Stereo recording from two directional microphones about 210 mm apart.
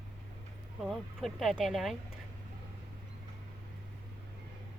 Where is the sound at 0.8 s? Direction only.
Centre (ahead or behind).